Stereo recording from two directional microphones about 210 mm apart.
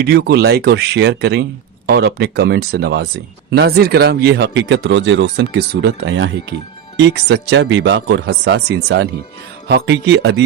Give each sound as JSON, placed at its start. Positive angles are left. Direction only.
{"t": 0.0, "sound": "speech", "side_deg": -50}